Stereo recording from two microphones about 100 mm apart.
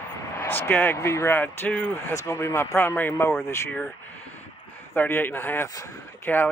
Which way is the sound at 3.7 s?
15° left (ahead or behind).